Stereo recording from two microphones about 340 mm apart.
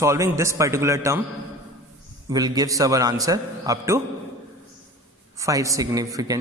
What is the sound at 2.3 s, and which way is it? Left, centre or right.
A man's voice, centre.